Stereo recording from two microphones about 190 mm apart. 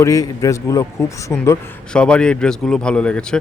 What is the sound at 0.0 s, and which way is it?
A man's voice, 15° left (ahead or behind).